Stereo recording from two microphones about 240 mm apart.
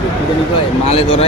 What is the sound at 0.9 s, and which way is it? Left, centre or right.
Speech, left.